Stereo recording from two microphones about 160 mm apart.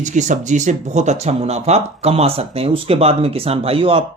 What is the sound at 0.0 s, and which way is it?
Speech, 50° right (ahead or behind).